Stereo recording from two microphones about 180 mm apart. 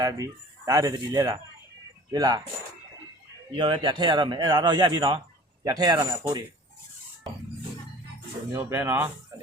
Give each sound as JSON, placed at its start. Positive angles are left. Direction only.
{"t": 0.0, "sound": "speech", "side_deg": -20}
{"t": 3.5, "sound": "speech", "side_deg": -25}
{"t": 8.5, "sound": "speech", "side_deg": -15}